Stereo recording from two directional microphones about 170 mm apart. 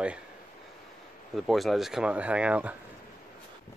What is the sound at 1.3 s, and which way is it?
Speech, centre (ahead or behind).